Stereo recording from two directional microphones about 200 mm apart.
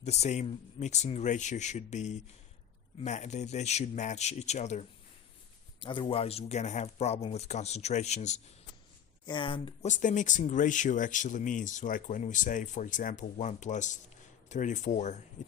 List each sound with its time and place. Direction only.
0.0 s speech: 35° left (ahead or behind)
5.8 s speech: 25° left (ahead or behind)
9.2 s speech: 25° left (ahead or behind)
9.9 s speech: 40° left (ahead or behind)